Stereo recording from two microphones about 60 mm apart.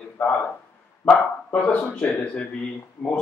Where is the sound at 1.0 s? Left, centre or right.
Left.